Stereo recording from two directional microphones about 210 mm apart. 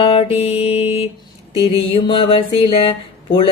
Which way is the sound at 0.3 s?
30° left (ahead or behind).